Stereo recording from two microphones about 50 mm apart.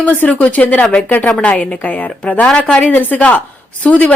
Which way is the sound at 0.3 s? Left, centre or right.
Left.